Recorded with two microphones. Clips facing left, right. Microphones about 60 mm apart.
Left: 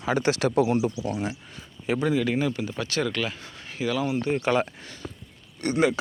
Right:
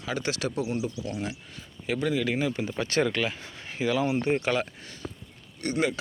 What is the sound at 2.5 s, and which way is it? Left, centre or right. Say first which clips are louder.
Speech: right 2 dB; right.